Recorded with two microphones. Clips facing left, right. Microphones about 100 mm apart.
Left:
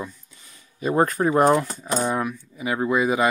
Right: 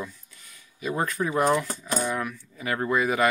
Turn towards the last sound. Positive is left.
turn(degrees=20)  # may be behind; listen again after turning